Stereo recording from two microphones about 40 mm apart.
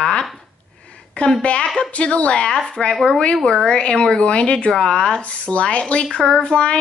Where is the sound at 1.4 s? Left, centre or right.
Left.